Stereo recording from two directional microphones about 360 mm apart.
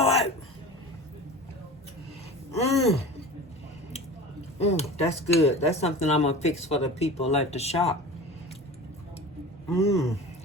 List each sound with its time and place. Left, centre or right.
0.0 s a sound: centre
2.5 s gasp: centre
4.7 s speech: centre
9.6 s speech: centre